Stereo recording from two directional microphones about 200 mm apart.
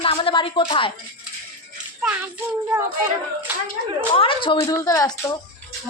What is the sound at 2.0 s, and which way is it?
Music, 5° right (ahead or behind).